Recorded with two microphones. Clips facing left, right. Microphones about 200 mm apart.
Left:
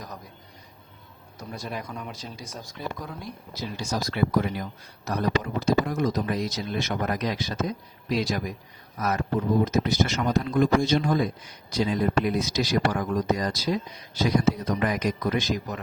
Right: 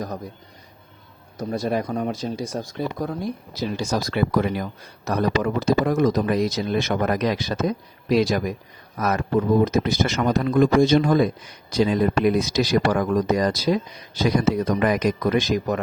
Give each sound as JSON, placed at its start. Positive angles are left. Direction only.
{"t": 1.4, "sound": "speech", "side_deg": -60}
{"t": 2.5, "sound": "speech", "side_deg": -55}
{"t": 3.5, "sound": "speech", "side_deg": -70}